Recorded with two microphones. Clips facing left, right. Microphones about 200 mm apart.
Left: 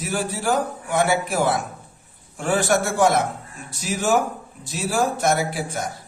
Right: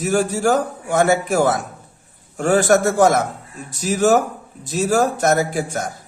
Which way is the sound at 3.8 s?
40° right (ahead or behind).